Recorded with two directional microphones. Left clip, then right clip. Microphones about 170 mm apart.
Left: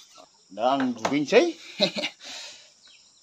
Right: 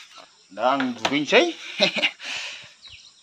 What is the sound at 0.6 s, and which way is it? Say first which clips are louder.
Speech: right 2 dB; 15° left (ahead or behind).